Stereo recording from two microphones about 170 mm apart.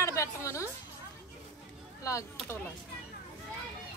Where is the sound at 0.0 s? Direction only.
15° left (ahead or behind).